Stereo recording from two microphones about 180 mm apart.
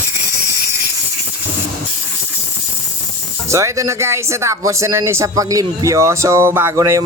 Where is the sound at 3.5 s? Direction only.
15° right (ahead or behind).